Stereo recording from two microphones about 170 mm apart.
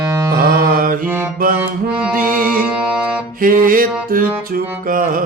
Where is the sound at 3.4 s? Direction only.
55° right (ahead or behind).